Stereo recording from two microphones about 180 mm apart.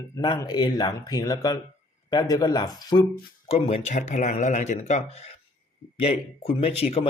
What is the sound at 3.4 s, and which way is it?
Speech, 35° left (ahead or behind).